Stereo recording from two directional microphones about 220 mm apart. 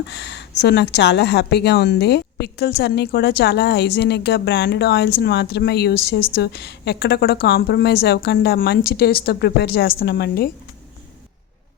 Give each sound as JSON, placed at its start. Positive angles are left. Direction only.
{"t": 0.1, "sound": "a woman's voice", "side_deg": 50}